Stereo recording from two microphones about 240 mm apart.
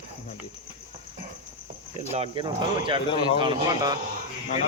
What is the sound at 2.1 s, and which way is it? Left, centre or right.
Speech, right.